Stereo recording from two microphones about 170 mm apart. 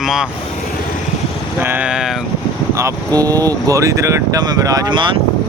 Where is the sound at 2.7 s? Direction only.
20° right (ahead or behind).